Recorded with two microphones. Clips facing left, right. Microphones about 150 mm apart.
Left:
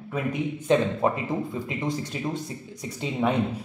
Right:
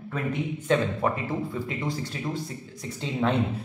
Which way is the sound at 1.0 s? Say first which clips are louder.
Left 2 dB; 25° left (ahead or behind).